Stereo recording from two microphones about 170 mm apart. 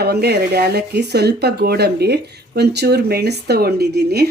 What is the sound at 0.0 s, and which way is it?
Speech, 70° right (ahead or behind).